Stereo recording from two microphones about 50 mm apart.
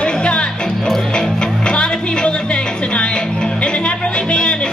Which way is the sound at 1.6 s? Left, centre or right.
Centre.